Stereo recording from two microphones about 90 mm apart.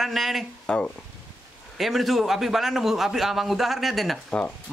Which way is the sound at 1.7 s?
Centre (ahead or behind).